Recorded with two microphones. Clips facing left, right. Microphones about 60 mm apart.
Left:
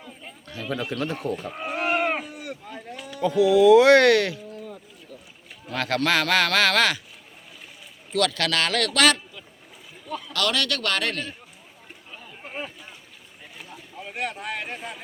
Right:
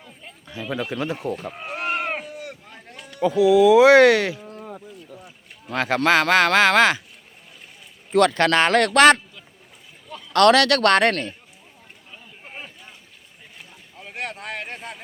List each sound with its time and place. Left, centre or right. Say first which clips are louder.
0.4 s speech: right 2 dB; centre
1.6 s sheep: left 2 dB; centre
2.1 s a sound: even; centre
3.3 s speech: right 1 dB; centre
5.7 s speech: right 4 dB; centre
8.1 s speech: right 7 dB; right
10.3 s a man's voice: right 11 dB; right
12.1 s a sound: left 4 dB; centre
14.3 s a sound: even; centre